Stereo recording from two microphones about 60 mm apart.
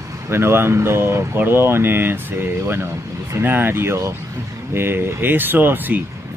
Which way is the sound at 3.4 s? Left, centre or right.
Right.